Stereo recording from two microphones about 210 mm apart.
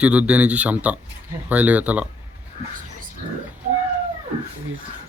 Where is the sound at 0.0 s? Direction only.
5° right (ahead or behind).